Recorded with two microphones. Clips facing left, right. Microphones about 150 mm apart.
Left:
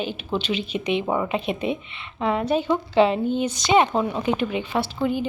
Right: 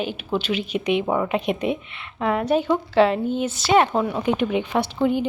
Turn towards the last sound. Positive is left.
turn(degrees=-20)  # may be behind; listen again after turning